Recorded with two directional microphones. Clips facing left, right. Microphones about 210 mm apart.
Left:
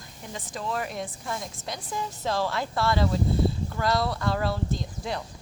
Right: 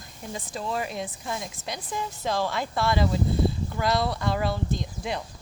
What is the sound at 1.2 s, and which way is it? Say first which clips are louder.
Speech: right 1 dB; 5° right (ahead or behind).